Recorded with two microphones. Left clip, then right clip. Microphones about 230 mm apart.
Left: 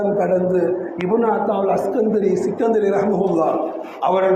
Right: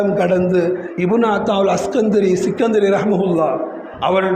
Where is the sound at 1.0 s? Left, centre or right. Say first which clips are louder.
Right 2 dB; right.